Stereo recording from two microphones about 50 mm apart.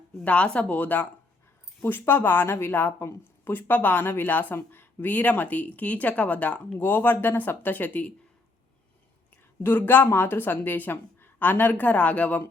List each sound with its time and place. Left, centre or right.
0.3 s speech: left
0.7 s a woman's voice: left
1.8 s speech: left
4.3 s a woman's voice: left
6.7 s a woman's voice: left
9.6 s a woman's voice: left